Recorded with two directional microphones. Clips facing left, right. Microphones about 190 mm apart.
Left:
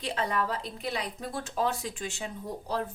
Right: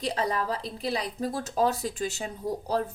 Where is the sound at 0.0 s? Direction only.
40° right (ahead or behind).